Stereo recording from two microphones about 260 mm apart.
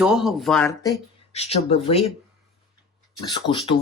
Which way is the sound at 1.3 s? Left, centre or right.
Left.